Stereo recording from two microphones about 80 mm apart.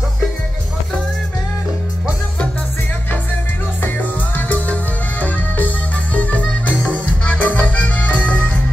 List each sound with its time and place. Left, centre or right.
3.8 s music: left